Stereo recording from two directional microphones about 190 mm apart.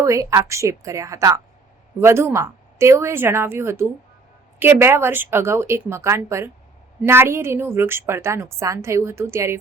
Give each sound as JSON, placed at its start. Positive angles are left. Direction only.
{"t": 0.0, "sound": "a woman's voice", "side_deg": -15}